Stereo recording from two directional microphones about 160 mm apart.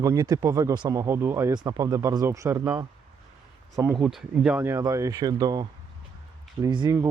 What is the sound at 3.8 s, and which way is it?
Speech, 5° right (ahead or behind).